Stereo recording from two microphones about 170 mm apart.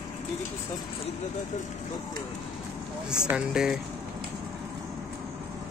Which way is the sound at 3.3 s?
5° right (ahead or behind).